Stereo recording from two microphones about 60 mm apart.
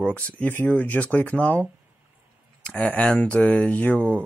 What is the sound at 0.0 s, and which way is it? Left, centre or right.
Speech, left.